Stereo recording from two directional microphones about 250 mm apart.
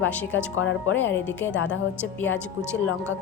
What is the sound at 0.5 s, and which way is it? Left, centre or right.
Speech, left.